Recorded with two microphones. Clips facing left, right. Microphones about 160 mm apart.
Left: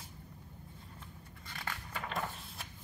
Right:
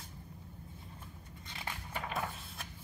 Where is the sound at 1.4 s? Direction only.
20° right (ahead or behind).